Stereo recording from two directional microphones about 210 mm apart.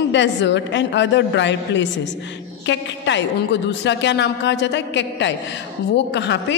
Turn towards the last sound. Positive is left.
turn(degrees=55)  # may be behind; listen again after turning